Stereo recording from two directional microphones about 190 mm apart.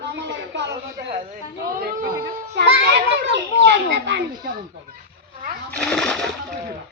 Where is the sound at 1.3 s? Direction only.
50° right (ahead or behind).